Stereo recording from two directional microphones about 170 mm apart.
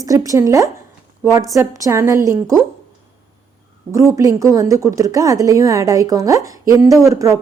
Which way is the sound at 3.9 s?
20° right (ahead or behind).